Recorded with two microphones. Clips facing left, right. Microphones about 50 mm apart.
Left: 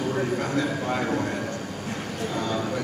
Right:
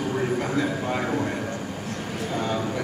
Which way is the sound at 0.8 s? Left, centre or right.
Centre.